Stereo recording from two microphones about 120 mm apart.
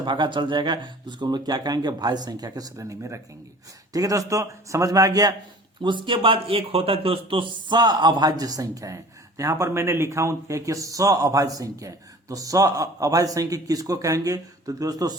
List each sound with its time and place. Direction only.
0.0 s a man's voice: 40° right (ahead or behind)
5.8 s a man's voice: 40° right (ahead or behind)